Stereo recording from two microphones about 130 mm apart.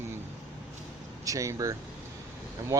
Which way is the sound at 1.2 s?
25° right (ahead or behind).